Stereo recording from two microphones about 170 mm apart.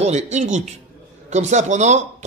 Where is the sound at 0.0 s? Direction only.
40° right (ahead or behind).